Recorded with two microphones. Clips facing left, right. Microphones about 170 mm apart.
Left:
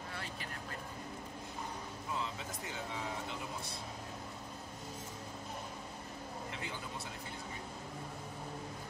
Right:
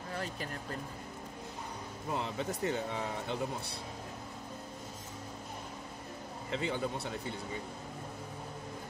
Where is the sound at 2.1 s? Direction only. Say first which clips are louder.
Right 7 dB; 60° right (ahead or behind).